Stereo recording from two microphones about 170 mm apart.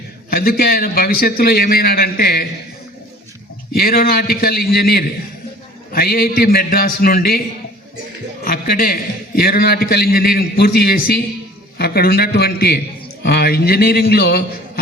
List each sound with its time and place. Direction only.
0.3 s a man's voice: 60° left (ahead or behind)
3.7 s a man's voice: 60° left (ahead or behind)
8.4 s a man's voice: 60° left (ahead or behind)